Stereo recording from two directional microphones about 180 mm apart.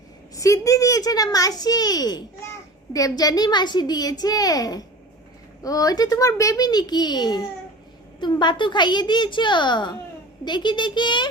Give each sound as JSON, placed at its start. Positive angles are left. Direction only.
{"t": 0.3, "sound": "a child's voice", "side_deg": 15}